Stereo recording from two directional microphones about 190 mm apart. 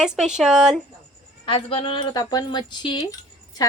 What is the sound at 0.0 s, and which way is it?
Speech, 5° right (ahead or behind).